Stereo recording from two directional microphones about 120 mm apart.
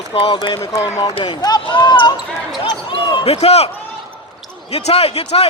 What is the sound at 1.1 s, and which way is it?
Speech, 45° left (ahead or behind).